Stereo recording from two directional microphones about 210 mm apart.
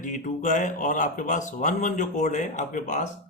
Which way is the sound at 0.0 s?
35° left (ahead or behind).